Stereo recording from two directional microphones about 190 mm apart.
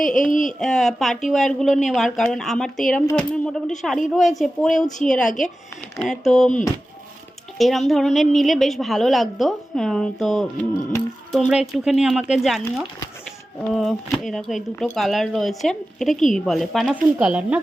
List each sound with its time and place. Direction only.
0.3 s speech: 45° left (ahead or behind)
0.6 s a woman's voice: centre (ahead or behind)
7.6 s a woman's voice: centre (ahead or behind)